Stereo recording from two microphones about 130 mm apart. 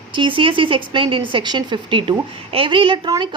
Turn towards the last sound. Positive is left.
turn(degrees=-35)  # may be behind; listen again after turning